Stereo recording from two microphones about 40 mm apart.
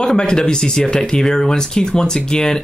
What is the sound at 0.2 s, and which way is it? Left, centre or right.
Speech, centre.